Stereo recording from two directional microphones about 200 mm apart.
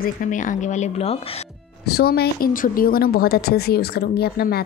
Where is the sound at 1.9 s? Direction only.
50° left (ahead or behind).